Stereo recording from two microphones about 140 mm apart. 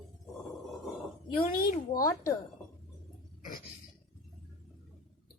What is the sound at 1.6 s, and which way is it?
Speech, 90° left.